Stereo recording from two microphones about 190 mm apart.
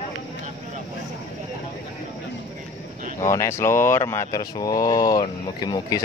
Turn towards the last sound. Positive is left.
turn(degrees=20)  # may be behind; listen again after turning